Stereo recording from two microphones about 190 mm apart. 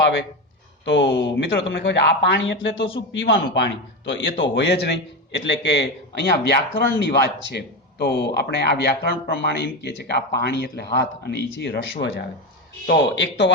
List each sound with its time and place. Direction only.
0.0 s speech: 75° left (ahead or behind)